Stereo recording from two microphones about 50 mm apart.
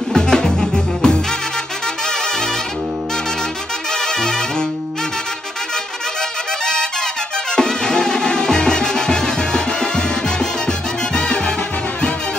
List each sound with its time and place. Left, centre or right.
0.1 s music: centre
4.2 s music: centre
6.6 s music: centre